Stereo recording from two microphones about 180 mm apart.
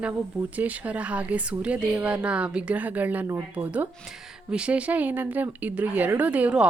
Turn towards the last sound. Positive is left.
turn(degrees=-5)  # may be behind; listen again after turning